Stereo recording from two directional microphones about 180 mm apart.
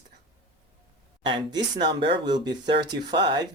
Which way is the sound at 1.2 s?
25° right (ahead or behind).